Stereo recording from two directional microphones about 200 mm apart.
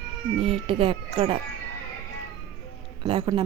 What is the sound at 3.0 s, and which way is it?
Speech, 25° right (ahead or behind).